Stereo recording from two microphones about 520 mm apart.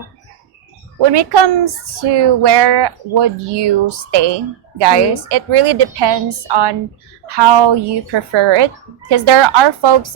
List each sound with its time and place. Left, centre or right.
1.1 s speech: right